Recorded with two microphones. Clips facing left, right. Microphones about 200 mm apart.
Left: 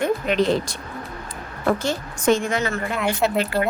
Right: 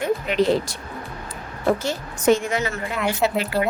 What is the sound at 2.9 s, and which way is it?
Speech, centre (ahead or behind).